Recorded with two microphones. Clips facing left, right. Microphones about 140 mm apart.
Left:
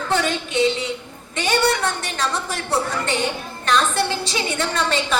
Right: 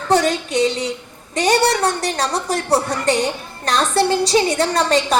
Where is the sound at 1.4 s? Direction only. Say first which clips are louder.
Right 4 dB; 35° right (ahead or behind).